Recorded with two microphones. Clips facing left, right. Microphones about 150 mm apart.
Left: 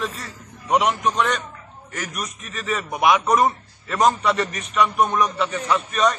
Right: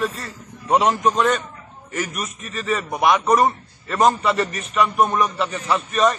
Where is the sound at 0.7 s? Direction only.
35° right (ahead or behind).